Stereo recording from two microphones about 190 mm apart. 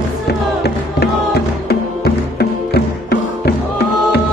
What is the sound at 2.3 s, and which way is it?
Music, 55° left (ahead or behind).